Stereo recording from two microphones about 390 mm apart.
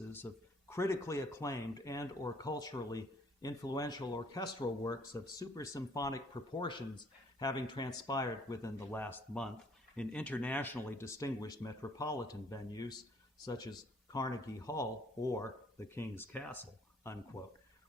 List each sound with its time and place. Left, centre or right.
0.1 s speech: centre